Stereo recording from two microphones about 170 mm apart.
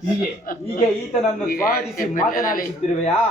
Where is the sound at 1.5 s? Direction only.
60° left (ahead or behind).